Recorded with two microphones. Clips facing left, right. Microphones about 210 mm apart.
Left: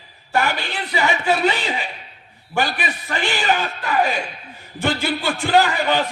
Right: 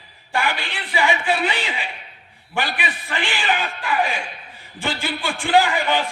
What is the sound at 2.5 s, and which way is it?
A man's voice, 40° left (ahead or behind).